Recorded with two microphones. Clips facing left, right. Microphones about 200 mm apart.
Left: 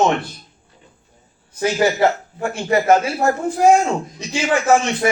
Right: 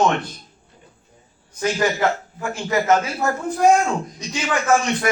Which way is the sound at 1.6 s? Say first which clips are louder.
Left 4 dB; 25° left (ahead or behind).